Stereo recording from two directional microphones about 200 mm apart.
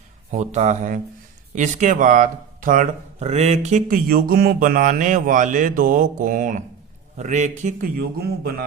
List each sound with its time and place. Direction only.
0.3 s speech: 35° right (ahead or behind); by 8.6 s 50° right (ahead or behind)